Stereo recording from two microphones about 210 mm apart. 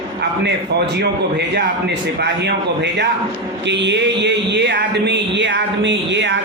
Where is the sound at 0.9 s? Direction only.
55° right (ahead or behind).